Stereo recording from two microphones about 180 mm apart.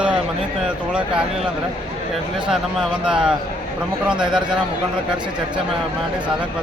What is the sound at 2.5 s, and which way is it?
Speech, 5° right (ahead or behind).